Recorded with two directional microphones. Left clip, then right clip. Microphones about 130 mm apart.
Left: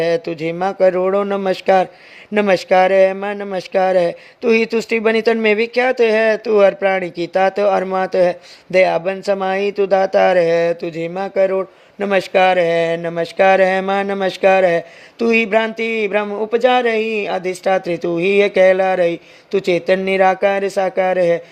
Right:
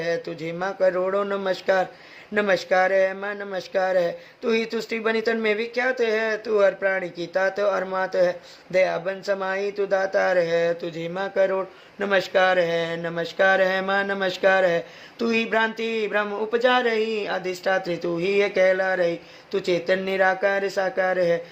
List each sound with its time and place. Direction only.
0.0 s speech: 70° left (ahead or behind)